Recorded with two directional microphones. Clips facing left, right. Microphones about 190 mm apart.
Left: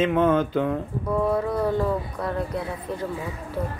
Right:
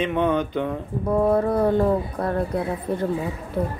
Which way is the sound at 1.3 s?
50° right (ahead or behind).